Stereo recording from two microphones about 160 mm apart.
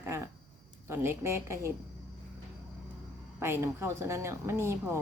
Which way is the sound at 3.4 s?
15° right (ahead or behind).